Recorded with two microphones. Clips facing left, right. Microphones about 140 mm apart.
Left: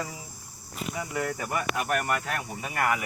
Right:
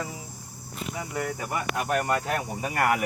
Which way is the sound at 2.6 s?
40° right (ahead or behind).